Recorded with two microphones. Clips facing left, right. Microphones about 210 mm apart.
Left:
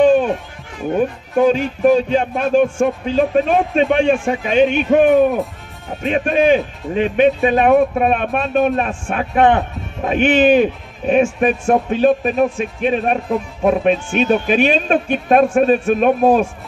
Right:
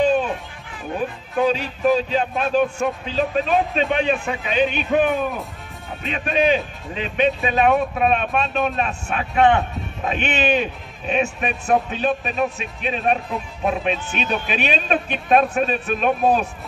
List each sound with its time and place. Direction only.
0.0 s music: 50° left (ahead or behind)
0.9 s speech: 50° left (ahead or behind)